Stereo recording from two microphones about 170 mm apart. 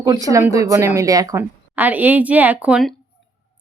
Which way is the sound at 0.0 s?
20° right (ahead or behind).